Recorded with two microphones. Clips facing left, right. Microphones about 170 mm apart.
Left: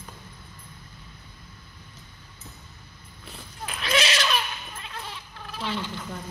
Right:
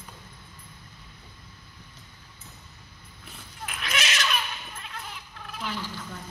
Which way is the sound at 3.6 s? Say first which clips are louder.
Left 6 dB; 30° left (ahead or behind).